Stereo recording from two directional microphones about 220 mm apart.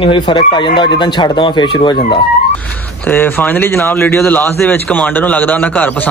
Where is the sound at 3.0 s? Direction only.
10° left (ahead or behind).